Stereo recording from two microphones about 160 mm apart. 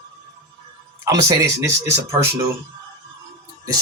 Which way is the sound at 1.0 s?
20° right (ahead or behind).